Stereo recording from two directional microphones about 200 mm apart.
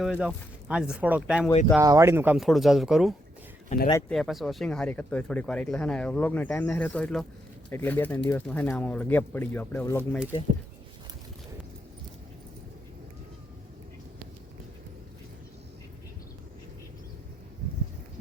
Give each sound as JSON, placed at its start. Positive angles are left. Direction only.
{"t": 0.0, "sound": "speech", "side_deg": -5}
{"t": 3.7, "sound": "speech", "side_deg": 35}
{"t": 4.1, "sound": "speech", "side_deg": 0}